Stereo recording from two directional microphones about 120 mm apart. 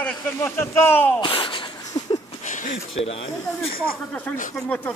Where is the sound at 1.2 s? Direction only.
45° left (ahead or behind).